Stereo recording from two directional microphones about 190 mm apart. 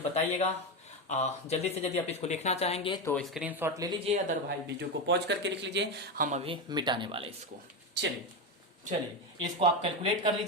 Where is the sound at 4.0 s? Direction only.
35° right (ahead or behind).